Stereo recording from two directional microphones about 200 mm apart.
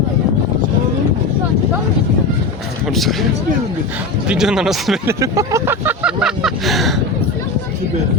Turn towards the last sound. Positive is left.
turn(degrees=0)  # may be behind; listen again after turning